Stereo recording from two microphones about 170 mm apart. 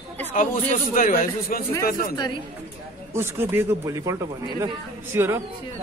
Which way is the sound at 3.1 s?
15° right (ahead or behind).